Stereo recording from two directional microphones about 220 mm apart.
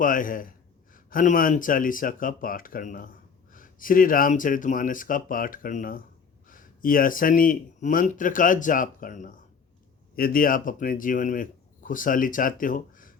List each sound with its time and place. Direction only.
0.0 s a man's voice: 40° left (ahead or behind)